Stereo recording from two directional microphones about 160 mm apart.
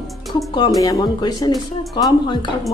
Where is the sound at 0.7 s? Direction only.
25° left (ahead or behind).